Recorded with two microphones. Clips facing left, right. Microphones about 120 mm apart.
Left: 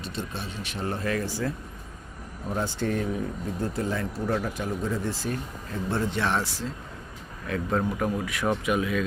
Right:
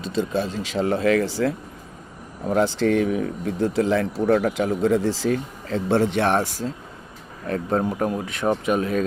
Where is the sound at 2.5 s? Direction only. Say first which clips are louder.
Right 9 dB; 90° right; by 6.7 s 50° right (ahead or behind).